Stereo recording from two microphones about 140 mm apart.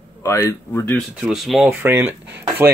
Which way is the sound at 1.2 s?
5° right (ahead or behind).